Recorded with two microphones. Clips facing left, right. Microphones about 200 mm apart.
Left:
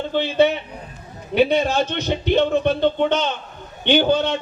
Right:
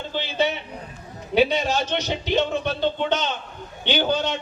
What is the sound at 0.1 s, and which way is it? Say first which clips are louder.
A man's voice: left 7 dB; 60° left (ahead or behind).